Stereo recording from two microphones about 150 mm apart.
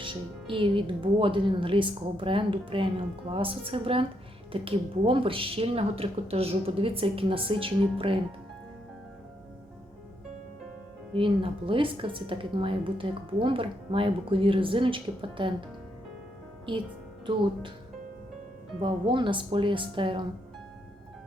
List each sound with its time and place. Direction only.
0.0 s a woman's voice: 35° right (ahead or behind)
11.1 s a woman's voice: 35° right (ahead or behind)
16.7 s a woman's voice: 35° right (ahead or behind)
18.8 s a woman's voice: 35° right (ahead or behind)